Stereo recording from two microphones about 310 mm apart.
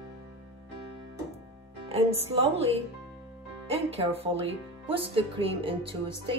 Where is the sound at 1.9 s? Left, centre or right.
Centre.